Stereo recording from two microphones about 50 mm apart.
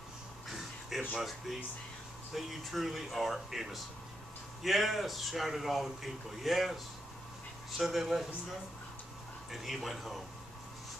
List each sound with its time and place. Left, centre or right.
0.9 s speech: centre
2.3 s a man's voice: centre
9.5 s a man's voice: centre